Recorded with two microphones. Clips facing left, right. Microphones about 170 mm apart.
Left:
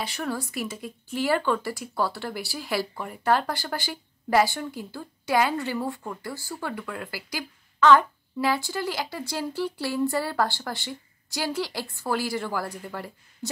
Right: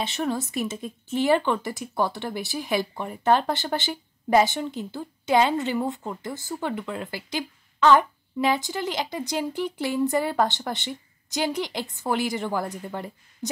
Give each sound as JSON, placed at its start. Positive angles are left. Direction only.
{"t": 0.0, "sound": "speech", "side_deg": -25}